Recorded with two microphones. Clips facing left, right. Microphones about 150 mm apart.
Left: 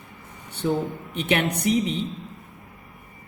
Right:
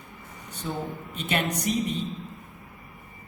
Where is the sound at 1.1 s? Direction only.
70° left (ahead or behind).